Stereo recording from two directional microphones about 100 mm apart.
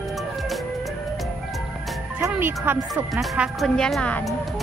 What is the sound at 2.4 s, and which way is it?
Speech, 20° right (ahead or behind).